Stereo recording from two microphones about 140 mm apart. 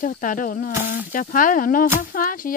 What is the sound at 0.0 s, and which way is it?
Speech, 70° left (ahead or behind).